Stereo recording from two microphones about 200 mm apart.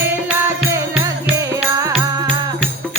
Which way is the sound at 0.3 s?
15° right (ahead or behind).